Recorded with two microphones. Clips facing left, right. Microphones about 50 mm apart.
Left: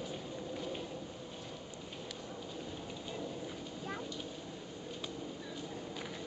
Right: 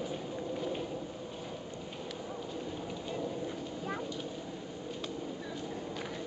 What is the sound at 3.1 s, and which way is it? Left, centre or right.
Thunder, centre.